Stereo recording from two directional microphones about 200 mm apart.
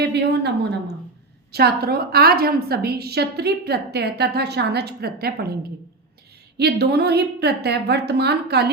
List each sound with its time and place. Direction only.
0.0 s a woman's voice: 55° right (ahead or behind)
6.6 s a woman's voice: 55° right (ahead or behind)